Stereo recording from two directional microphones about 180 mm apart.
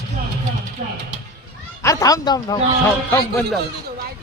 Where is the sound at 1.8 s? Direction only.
20° left (ahead or behind).